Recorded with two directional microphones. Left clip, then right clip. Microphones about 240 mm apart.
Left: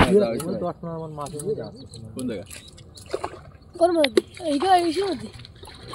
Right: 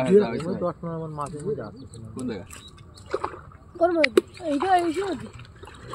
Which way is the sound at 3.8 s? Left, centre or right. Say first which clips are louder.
Left 1 dB; left.